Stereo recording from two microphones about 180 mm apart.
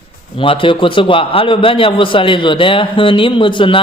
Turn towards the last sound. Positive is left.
turn(degrees=30)  # may be behind; listen again after turning